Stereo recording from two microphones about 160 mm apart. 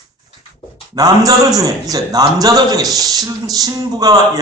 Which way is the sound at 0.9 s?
25° right (ahead or behind).